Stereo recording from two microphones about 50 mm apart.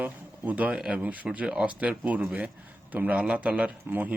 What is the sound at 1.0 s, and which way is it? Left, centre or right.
Speech, right.